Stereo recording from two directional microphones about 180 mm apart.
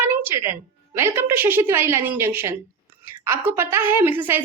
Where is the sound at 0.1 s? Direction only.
10° right (ahead or behind).